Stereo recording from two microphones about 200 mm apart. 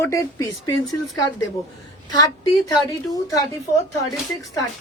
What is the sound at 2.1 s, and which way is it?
A woman's voice, 20° left (ahead or behind).